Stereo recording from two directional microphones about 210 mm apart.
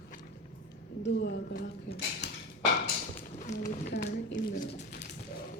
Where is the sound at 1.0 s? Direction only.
55° left (ahead or behind).